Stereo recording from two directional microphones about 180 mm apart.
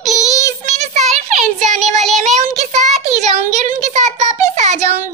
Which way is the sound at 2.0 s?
Centre (ahead or behind).